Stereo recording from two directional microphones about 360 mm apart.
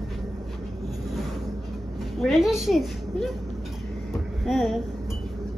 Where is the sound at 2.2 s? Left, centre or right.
Centre.